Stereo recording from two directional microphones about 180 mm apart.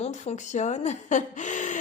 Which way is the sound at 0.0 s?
40° left (ahead or behind).